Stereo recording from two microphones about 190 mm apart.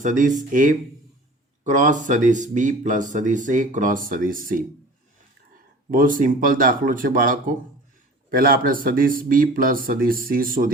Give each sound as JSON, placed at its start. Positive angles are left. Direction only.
{"t": 0.0, "sound": "speech", "side_deg": -40}
{"t": 5.9, "sound": "speech", "side_deg": -45}